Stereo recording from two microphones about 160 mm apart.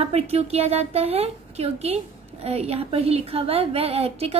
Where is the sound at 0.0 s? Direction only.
40° right (ahead or behind).